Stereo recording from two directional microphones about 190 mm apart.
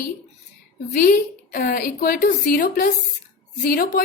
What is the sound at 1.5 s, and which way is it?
A woman's voice, 50° left (ahead or behind).